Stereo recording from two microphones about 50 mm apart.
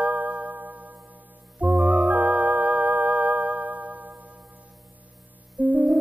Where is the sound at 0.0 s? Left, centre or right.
Right.